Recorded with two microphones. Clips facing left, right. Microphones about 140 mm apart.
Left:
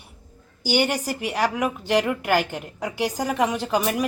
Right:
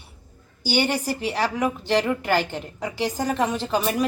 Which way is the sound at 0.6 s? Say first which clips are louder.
Left 1 dB; 15° left (ahead or behind).